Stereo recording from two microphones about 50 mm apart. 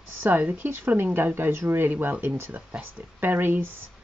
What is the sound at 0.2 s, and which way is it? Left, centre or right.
Speech, right.